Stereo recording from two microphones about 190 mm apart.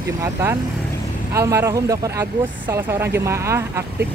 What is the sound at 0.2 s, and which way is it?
Speech, 10° right (ahead or behind).